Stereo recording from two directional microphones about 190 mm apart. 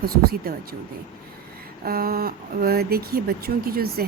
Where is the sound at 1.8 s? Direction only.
50° right (ahead or behind).